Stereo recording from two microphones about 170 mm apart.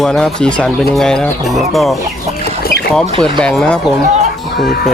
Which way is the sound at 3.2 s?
5° left (ahead or behind).